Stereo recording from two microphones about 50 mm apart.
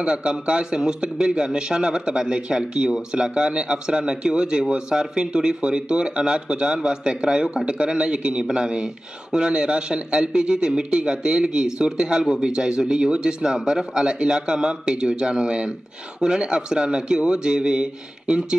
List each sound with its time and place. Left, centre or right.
0.0 s a man's voice: centre